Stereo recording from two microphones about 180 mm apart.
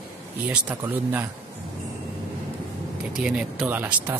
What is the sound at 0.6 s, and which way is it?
Speech, 10° right (ahead or behind).